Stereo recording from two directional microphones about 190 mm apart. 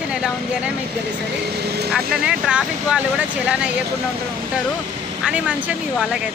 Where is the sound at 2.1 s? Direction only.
5° right (ahead or behind).